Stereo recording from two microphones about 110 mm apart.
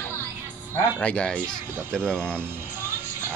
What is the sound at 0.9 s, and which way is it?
Speech, 10° left (ahead or behind).